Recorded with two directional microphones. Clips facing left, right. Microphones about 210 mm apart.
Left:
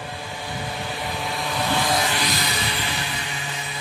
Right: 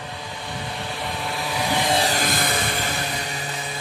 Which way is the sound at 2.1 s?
50° right (ahead or behind).